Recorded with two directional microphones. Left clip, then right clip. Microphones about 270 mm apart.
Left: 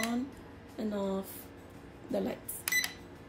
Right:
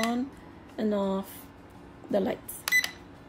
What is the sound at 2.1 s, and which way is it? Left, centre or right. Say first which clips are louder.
Speech: right 7 dB; right.